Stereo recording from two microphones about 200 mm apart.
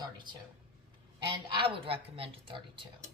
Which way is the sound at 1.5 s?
25° right (ahead or behind).